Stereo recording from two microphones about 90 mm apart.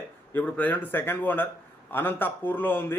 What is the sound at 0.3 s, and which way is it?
A man's voice, 15° left (ahead or behind).